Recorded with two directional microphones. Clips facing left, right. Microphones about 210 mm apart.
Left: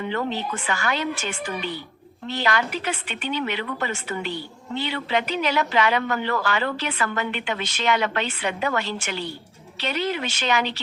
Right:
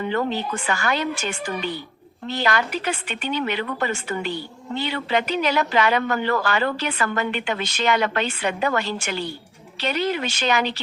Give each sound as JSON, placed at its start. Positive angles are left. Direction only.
{"t": 0.1, "sound": "speech", "side_deg": -45}